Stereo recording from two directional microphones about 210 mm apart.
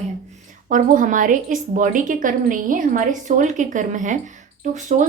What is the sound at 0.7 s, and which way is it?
A woman's voice, 40° right (ahead or behind).